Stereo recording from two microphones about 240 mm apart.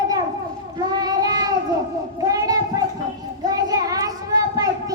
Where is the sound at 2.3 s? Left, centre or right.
Centre.